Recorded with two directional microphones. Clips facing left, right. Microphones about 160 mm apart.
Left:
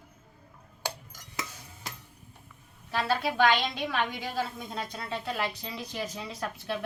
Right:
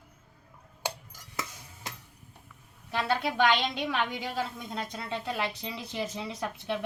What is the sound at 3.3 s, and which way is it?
Speech, 20° right (ahead or behind).